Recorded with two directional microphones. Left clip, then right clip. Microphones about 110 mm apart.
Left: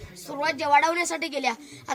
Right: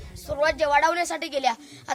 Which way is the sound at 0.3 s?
35° right (ahead or behind).